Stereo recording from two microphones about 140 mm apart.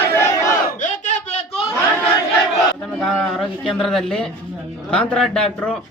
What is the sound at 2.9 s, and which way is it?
A man's voice, 5° left (ahead or behind).